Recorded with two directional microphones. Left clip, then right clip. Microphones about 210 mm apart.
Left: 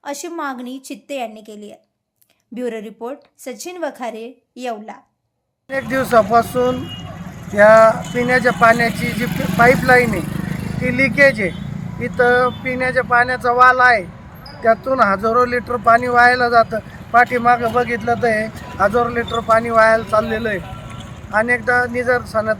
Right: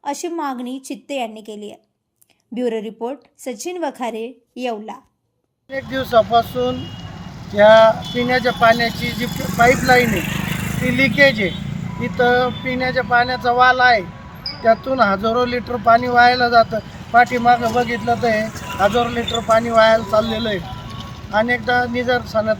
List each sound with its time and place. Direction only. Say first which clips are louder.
0.0 s a woman's voice: right 2 dB; 5° right (ahead or behind)
5.7 s speech: left 2 dB; 5° left (ahead or behind)
9.2 s speech: left 2 dB; 35° left (ahead or behind)
10.0 s vehicle: even; 50° left (ahead or behind)
10.8 s speech: left 1 dB; 5° left (ahead or behind)
18.4 s a sound: right 2 dB; 45° left (ahead or behind)
18.9 s speech: left 1 dB; centre (ahead or behind)